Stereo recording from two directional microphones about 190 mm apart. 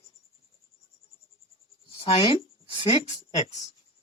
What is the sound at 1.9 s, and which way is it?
Speech, 30° left (ahead or behind).